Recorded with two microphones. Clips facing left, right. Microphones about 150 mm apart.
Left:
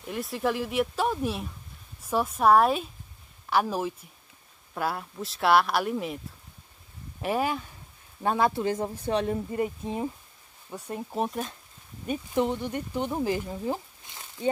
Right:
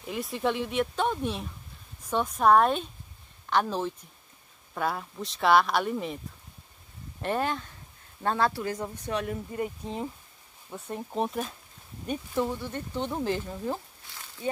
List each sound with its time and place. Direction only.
0.0 s speech: centre (ahead or behind); by 9.4 s 30° left (ahead or behind)
9.6 s speech: 15° left (ahead or behind)
12.4 s speech: 20° left (ahead or behind)